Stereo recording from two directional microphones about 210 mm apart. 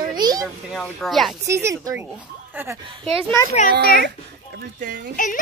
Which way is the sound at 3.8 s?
45° left (ahead or behind).